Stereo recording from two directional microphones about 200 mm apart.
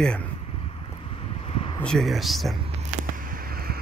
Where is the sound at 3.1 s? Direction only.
45° right (ahead or behind).